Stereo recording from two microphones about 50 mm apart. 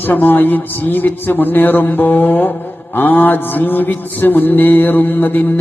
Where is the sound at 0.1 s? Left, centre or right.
Left.